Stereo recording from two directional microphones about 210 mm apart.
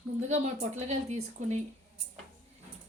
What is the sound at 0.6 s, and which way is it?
Speech, 35° right (ahead or behind).